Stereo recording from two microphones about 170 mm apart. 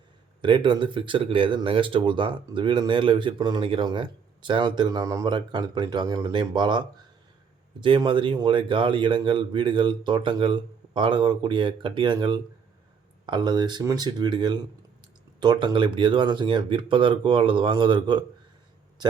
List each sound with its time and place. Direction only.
0.4 s speech: 30° right (ahead or behind)